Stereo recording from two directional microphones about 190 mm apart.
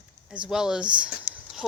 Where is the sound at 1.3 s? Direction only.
40° left (ahead or behind).